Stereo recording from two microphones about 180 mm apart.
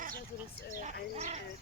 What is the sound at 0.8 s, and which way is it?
Bird, 40° right (ahead or behind).